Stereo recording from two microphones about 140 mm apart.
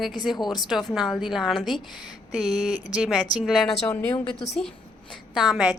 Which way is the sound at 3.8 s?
10° left (ahead or behind).